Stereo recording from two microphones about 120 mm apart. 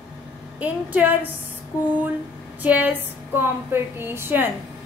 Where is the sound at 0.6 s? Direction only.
15° right (ahead or behind).